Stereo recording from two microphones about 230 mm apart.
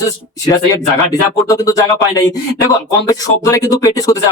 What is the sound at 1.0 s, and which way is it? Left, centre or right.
Speech, centre.